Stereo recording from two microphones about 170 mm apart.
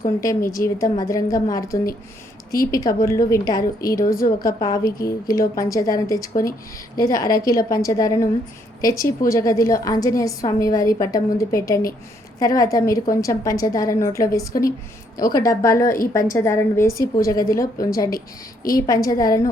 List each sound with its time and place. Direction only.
0.2 s a woman's voice: 20° left (ahead or behind)
4.0 s a woman's voice: 55° left (ahead or behind)
4.4 s a woman's voice: 20° left (ahead or behind)